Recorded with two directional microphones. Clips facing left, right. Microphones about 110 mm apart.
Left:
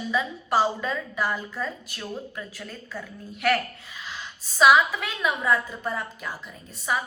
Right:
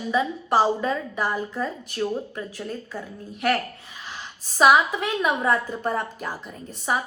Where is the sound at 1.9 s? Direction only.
30° right (ahead or behind).